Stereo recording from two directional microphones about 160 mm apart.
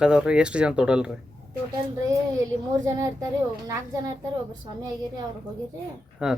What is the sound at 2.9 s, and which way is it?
Speech, 20° right (ahead or behind).